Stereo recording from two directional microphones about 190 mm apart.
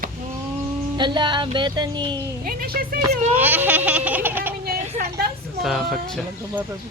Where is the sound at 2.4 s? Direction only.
50° right (ahead or behind).